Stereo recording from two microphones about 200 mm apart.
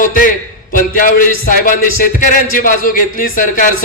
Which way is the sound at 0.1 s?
45° left (ahead or behind).